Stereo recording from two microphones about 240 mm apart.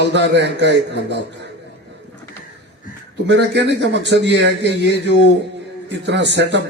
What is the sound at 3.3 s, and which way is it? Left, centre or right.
Speech, right.